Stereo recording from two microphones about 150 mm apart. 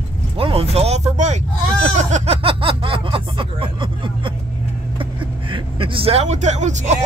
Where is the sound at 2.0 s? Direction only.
45° right (ahead or behind).